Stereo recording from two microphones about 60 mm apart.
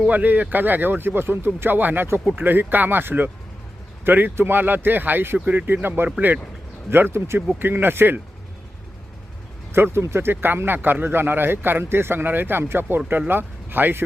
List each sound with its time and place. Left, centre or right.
0.1 s speech: right
9.7 s speech: right